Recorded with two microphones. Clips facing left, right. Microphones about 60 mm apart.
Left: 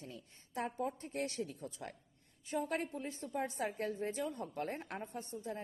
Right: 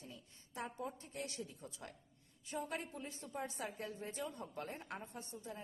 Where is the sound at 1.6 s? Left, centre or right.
Left.